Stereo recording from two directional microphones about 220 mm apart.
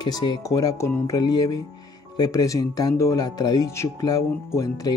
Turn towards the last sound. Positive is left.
turn(degrees=15)  # may be behind; listen again after turning